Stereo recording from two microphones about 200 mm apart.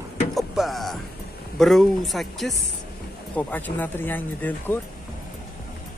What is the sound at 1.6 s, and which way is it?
Speech, centre (ahead or behind).